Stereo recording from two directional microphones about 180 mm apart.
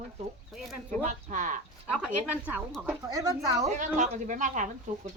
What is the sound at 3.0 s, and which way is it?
Speech, 20° right (ahead or behind).